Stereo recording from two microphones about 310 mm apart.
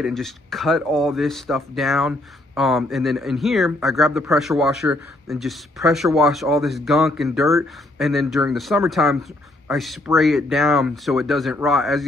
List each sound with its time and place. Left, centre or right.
0.0 s speech: centre